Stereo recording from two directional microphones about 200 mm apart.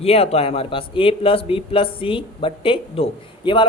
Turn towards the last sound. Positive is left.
turn(degrees=25)  # may be behind; listen again after turning